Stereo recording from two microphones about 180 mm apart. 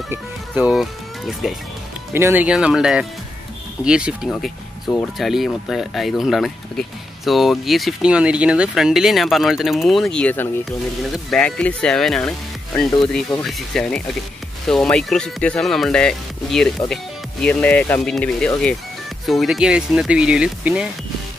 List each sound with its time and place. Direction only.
0.1 s speech: 5° right (ahead or behind)
2.1 s speech: 10° right (ahead or behind)